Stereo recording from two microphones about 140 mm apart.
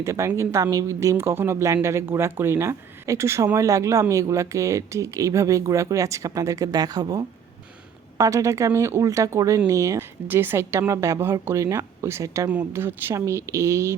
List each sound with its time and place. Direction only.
0.0 s speech: 20° right (ahead or behind)